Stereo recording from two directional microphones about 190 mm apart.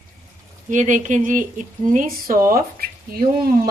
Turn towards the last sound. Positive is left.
turn(degrees=-50)  # may be behind; listen again after turning